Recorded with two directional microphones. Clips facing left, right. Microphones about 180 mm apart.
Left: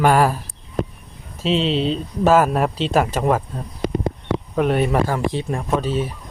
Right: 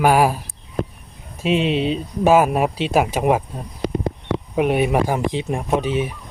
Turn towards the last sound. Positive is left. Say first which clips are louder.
# right 1 dB
turn(degrees=-15)  # may be behind; listen again after turning